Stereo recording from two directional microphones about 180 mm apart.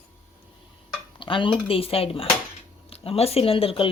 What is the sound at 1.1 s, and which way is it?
Speech, 30° left (ahead or behind).